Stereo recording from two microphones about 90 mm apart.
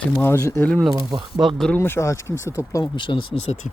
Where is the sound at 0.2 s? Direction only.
30° left (ahead or behind).